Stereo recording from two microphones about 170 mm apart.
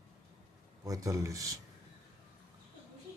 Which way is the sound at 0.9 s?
20° right (ahead or behind).